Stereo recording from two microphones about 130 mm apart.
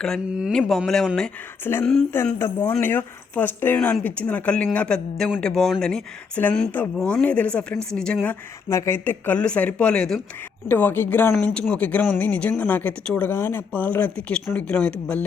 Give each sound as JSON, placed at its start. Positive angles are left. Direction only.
{"t": 0.3, "sound": "speech", "side_deg": -5}
{"t": 0.9, "sound": "speech", "side_deg": 5}
{"t": 2.4, "sound": "speech", "side_deg": 20}